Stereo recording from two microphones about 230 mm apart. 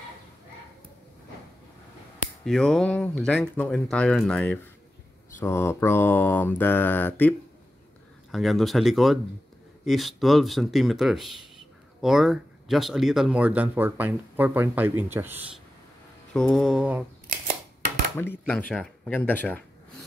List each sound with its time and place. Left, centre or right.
2.4 s speech: centre
5.4 s mantra: centre
8.3 s speech: centre
16.3 s speech: centre
18.1 s speech: centre
18.4 s mantra: centre